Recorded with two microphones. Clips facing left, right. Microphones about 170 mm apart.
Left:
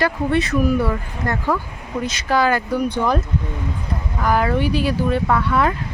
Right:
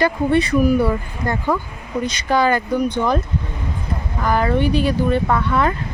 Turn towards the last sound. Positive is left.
turn(degrees=5)  # may be behind; listen again after turning